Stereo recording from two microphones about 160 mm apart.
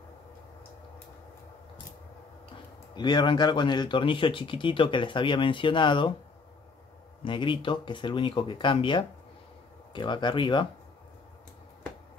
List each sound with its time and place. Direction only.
2.9 s speech: 25° left (ahead or behind)
7.2 s speech: 30° left (ahead or behind)